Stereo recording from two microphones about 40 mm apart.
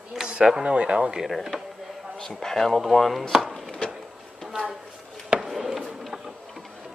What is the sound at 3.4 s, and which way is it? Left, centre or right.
Chopping, centre.